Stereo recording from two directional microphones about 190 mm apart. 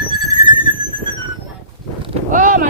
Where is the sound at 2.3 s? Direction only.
45° right (ahead or behind).